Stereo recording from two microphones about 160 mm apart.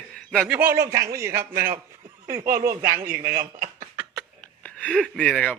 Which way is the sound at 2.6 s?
65° right (ahead or behind).